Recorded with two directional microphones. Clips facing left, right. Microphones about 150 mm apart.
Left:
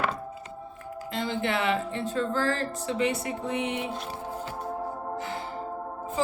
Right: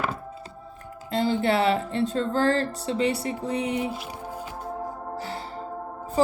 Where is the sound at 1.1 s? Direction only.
35° right (ahead or behind).